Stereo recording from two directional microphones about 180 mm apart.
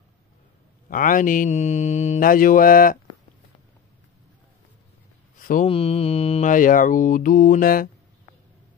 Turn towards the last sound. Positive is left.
turn(degrees=50)  # may be behind; listen again after turning